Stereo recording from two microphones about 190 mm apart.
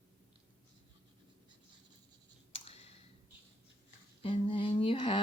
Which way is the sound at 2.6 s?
30° left (ahead or behind).